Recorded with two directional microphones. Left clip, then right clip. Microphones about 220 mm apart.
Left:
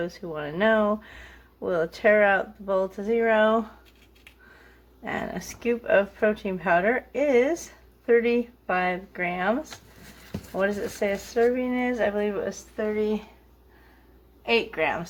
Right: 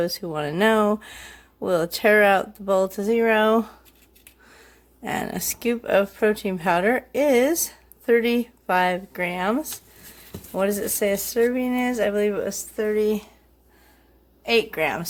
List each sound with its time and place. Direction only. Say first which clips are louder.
0.0 s speech: right 6 dB; 50° right (ahead or behind)
5.0 s speech: right 4 dB; 45° right (ahead or behind)
14.4 s speech: right 3 dB; 50° right (ahead or behind)